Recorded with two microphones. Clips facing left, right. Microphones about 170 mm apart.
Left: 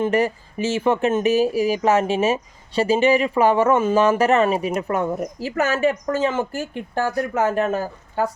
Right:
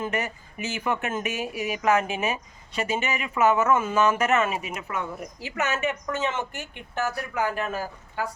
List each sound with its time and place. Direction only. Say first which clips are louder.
0.0 s speech: left 10 dB; 30° left (ahead or behind)